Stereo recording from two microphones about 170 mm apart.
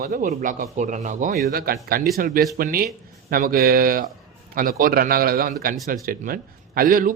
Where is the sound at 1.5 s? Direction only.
60° right (ahead or behind).